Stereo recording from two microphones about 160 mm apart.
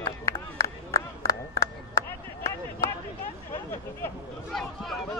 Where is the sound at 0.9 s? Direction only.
20° left (ahead or behind).